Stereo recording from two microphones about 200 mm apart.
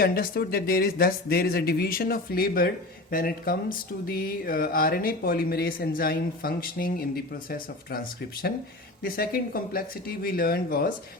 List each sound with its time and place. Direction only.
0.0 s speech: 50° left (ahead or behind)